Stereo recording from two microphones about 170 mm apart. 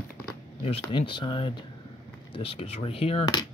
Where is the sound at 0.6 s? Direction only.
30° left (ahead or behind).